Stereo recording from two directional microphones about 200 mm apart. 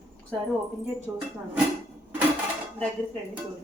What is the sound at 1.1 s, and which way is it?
Speech, 10° right (ahead or behind).